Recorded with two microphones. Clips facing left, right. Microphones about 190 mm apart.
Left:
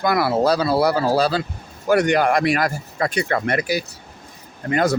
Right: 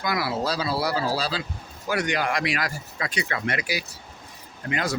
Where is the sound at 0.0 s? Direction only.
55° left (ahead or behind).